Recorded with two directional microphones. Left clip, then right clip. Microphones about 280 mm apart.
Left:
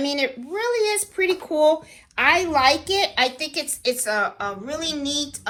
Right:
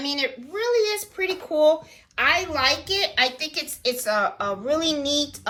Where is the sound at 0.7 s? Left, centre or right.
Left.